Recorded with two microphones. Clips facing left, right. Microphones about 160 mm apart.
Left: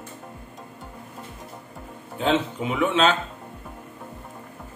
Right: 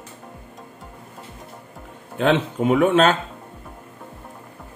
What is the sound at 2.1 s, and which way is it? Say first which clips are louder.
Speech: right 3 dB; 65° right (ahead or behind).